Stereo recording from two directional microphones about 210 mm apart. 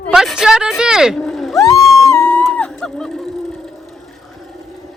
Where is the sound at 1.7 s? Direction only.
Centre (ahead or behind).